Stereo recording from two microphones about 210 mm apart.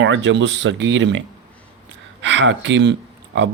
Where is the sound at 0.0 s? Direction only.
65° right (ahead or behind).